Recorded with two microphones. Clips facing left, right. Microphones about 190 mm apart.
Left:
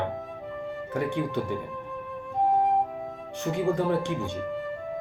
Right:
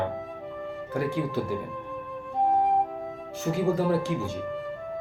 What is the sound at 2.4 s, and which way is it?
Flute, centre (ahead or behind).